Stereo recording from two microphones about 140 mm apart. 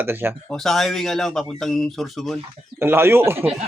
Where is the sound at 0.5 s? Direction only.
Centre (ahead or behind).